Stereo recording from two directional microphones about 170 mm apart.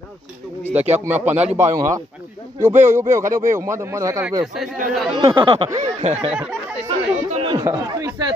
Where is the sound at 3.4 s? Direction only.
15° right (ahead or behind).